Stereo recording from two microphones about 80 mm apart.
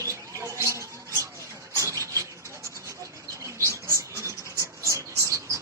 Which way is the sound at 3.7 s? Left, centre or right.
Right.